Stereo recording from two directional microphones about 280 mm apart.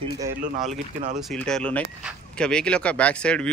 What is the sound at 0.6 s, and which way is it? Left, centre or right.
Speech, right.